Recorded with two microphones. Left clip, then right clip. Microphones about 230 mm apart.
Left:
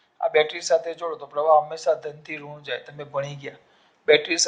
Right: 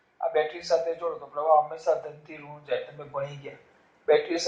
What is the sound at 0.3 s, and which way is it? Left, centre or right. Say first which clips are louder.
Speech: left 5 dB; left.